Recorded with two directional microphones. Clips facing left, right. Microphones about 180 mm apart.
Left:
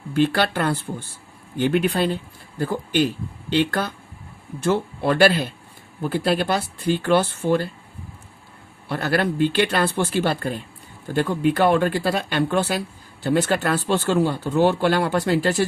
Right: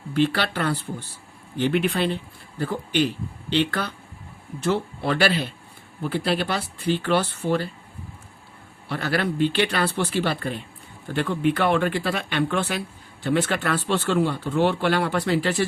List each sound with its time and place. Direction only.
0.1 s speech: 45° left (ahead or behind)
8.9 s speech: 45° left (ahead or behind)